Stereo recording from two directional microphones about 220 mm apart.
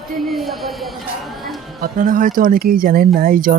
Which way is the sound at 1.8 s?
35° right (ahead or behind).